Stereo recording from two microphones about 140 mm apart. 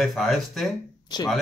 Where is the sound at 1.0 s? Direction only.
30° left (ahead or behind).